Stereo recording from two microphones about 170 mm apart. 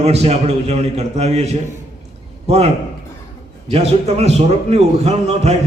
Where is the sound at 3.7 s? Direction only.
40° right (ahead or behind).